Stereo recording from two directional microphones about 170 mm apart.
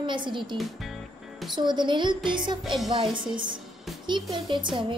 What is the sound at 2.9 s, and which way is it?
A woman's voice, 30° right (ahead or behind).